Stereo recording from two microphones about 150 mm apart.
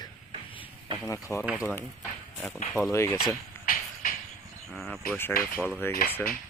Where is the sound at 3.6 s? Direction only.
65° left (ahead or behind).